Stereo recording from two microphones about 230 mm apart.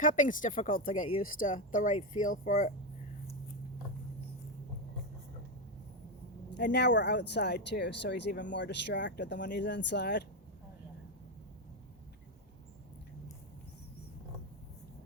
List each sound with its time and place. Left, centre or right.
0.0 s speech: left
6.6 s speech: left